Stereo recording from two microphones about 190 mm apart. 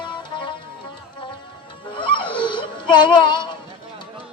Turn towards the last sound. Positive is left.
turn(degrees=25)  # may be behind; listen again after turning